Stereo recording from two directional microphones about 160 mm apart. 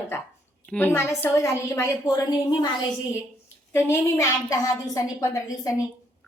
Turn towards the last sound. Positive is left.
turn(degrees=20)  # may be behind; listen again after turning